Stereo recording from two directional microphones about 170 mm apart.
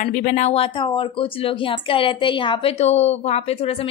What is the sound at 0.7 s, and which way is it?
A woman's voice, 30° left (ahead or behind).